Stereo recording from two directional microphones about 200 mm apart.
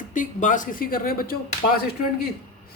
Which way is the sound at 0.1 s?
40° left (ahead or behind).